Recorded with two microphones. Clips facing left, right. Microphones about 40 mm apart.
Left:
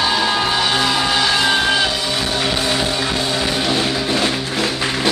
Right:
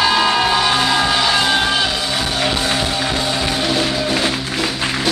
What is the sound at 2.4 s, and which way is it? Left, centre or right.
Music, centre.